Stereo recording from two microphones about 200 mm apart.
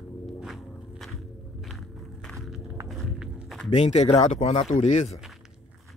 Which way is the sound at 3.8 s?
35° left (ahead or behind).